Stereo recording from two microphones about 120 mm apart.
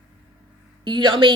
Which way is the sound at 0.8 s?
40° right (ahead or behind).